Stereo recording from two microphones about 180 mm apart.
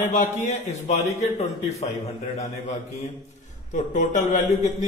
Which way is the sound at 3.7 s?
45° left (ahead or behind).